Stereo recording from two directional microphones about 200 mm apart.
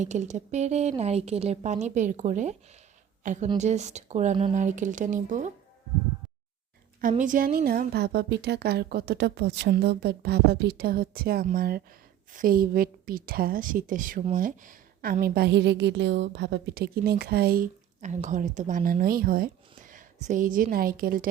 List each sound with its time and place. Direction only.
0.0 s speech: 35° right (ahead or behind)
7.1 s a woman's voice: 40° right (ahead or behind)